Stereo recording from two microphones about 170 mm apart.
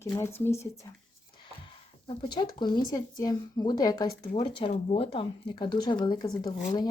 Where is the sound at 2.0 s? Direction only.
25° left (ahead or behind).